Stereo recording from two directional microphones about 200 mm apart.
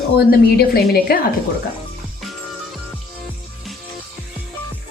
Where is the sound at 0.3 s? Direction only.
50° left (ahead or behind).